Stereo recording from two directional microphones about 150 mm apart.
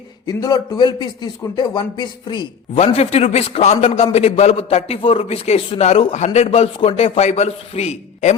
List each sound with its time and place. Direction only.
0.3 s speech: 25° left (ahead or behind)
2.7 s a man's voice: 45° left (ahead or behind)